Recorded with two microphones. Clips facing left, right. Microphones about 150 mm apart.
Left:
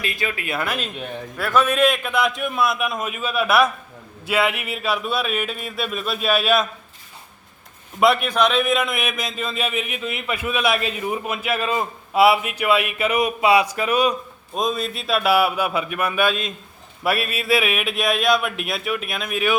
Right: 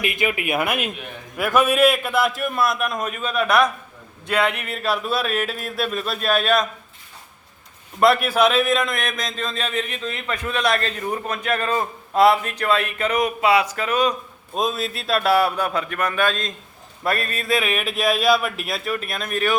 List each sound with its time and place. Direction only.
0.0 s speech: 15° right (ahead or behind); by 6.7 s 5° left (ahead or behind)
7.9 s a man's voice: centre (ahead or behind)
14.5 s speech: centre (ahead or behind)